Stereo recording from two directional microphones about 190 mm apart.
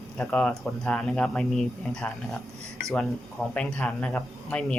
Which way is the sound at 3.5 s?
5° left (ahead or behind).